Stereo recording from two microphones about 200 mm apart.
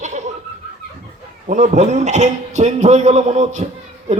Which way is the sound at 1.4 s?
40° right (ahead or behind).